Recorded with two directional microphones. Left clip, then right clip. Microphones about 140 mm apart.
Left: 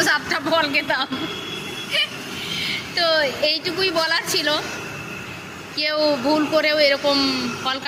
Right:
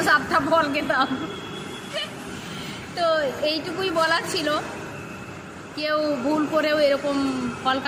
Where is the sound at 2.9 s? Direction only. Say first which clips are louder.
Left 2 dB; 30° right (ahead or behind).